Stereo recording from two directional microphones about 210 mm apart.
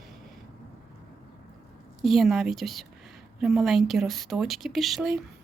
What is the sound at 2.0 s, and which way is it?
Speech, centre (ahead or behind).